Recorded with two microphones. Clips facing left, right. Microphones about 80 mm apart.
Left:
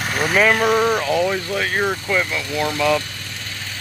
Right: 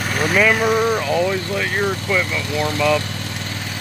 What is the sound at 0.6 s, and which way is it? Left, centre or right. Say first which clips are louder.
Vehicle: even; centre.